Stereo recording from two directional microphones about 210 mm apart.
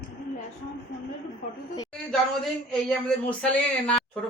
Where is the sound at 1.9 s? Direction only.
Centre (ahead or behind).